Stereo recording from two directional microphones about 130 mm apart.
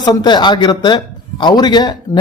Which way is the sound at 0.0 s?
35° left (ahead or behind).